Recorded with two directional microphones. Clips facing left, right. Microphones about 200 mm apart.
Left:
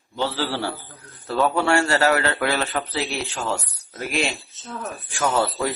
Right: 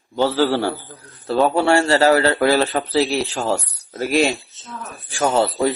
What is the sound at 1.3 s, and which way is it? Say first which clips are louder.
A man's voice: right 4 dB; 30° right (ahead or behind).